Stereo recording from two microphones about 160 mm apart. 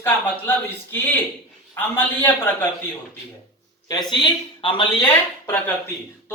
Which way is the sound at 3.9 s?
30° left (ahead or behind).